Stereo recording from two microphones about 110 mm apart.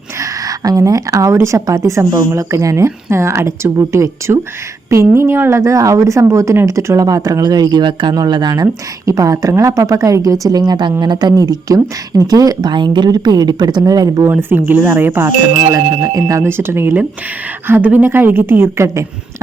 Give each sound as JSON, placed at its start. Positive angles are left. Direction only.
{"t": 0.2, "sound": "a woman's voice", "side_deg": -35}
{"t": 14.3, "sound": "a woman's voice", "side_deg": -20}
{"t": 15.7, "sound": "a woman's voice", "side_deg": -30}